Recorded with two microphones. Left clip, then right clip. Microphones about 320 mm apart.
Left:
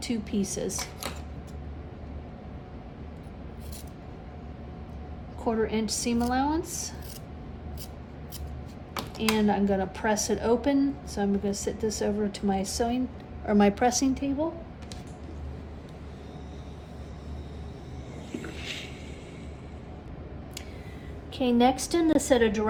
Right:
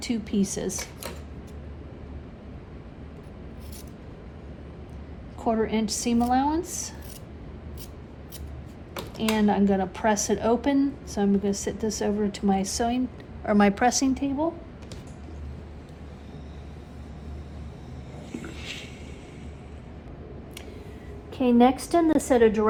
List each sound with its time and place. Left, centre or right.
0.0 s a woman's voice: right
5.4 s a woman's voice: right
9.4 s a woman's voice: right
18.3 s a sound: centre
21.4 s a woman's voice: centre